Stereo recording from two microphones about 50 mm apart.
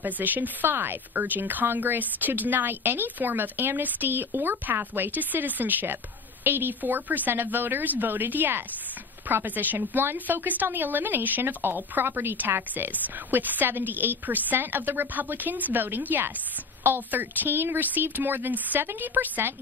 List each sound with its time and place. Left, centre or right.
0.0 s speech: right
10.1 s speech: right